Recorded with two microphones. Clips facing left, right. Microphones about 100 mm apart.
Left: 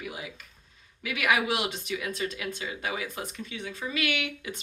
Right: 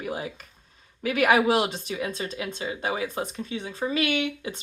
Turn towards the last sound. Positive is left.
turn(degrees=-30)  # may be behind; listen again after turning